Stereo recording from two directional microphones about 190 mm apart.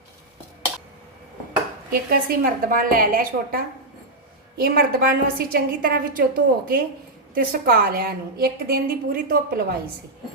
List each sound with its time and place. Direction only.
1.9 s a woman's voice: 50° right (ahead or behind)